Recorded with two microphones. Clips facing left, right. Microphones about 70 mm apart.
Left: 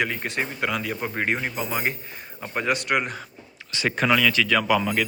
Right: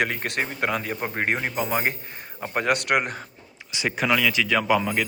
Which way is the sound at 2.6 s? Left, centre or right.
Right.